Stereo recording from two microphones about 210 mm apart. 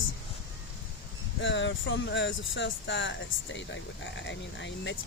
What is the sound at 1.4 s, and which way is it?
Speech, 60° left (ahead or behind).